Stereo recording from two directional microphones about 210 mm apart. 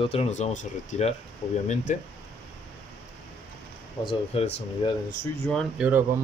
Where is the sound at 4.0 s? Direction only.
25° left (ahead or behind).